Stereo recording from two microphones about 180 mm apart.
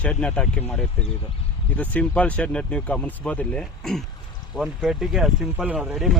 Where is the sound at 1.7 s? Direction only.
10° left (ahead or behind).